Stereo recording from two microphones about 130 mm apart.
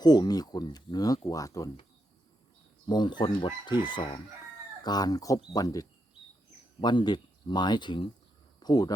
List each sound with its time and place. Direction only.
0.0 s speech: 30° left (ahead or behind)
2.8 s speech: 35° left (ahead or behind)